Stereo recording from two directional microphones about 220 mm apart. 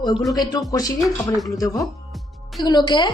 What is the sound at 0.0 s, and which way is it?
A woman's voice, 20° left (ahead or behind).